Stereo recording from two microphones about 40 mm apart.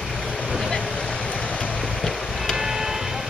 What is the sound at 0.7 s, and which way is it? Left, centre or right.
Vehicle, left.